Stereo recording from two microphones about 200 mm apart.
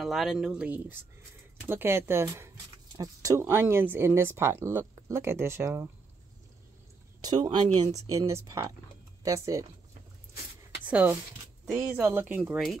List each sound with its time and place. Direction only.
0.0 s speech: centre (ahead or behind)
7.4 s speech: 25° right (ahead or behind)
10.9 s speech: 5° right (ahead or behind)
11.9 s speech: 10° right (ahead or behind)